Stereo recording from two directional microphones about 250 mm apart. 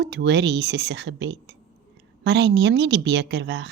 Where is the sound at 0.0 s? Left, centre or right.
Right.